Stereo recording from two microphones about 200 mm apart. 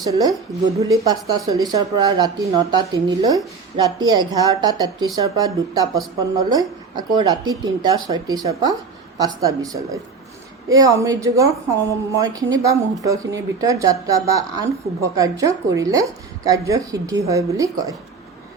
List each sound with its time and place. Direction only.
0.0 s speech: 20° right (ahead or behind)